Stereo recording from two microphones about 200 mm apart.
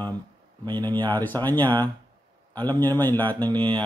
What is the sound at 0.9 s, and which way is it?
Speech, 10° left (ahead or behind).